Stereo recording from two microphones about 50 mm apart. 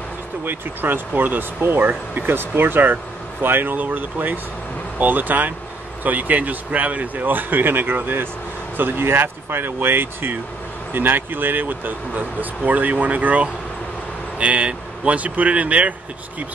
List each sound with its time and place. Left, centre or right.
0.5 s speech: right